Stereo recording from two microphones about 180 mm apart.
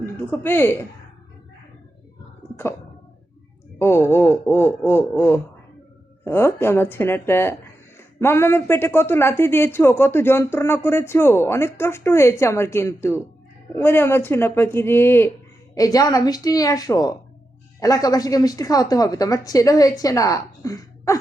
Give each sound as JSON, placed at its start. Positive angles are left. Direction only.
{"t": 0.0, "sound": "speech", "side_deg": 10}
{"t": 3.8, "sound": "a woman's voice", "side_deg": 15}